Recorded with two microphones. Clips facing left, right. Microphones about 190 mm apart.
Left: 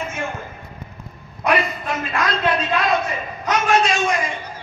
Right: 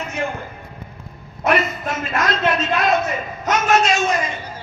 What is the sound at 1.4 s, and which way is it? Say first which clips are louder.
A man's voice: right 1 dB; 25° right (ahead or behind).